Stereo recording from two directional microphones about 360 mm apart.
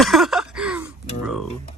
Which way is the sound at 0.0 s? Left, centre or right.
Centre.